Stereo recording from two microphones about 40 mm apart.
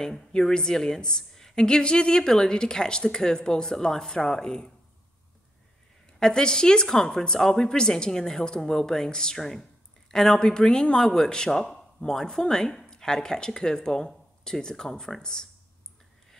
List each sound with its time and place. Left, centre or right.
0.0 s a woman's voice: centre
6.1 s a woman's voice: centre